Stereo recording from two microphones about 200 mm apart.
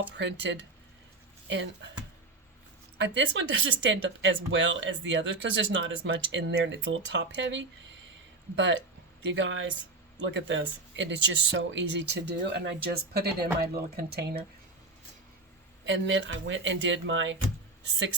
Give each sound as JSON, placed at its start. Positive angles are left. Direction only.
{"t": 0.2, "sound": "speech", "side_deg": -65}
{"t": 3.0, "sound": "speech", "side_deg": -65}
{"t": 9.2, "sound": "speech", "side_deg": -65}
{"t": 15.8, "sound": "speech", "side_deg": -65}